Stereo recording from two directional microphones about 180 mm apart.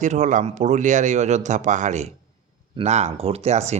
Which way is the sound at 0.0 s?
40° right (ahead or behind).